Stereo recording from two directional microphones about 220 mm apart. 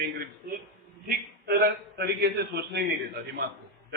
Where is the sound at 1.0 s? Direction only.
45° right (ahead or behind).